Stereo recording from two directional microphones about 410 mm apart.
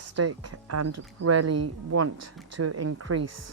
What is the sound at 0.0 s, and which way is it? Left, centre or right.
Speech, right.